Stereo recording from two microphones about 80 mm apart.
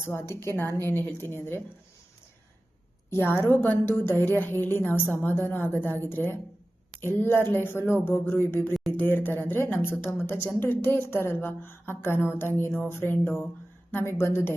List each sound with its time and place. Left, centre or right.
0.0 s speech: left
3.1 s a woman's voice: left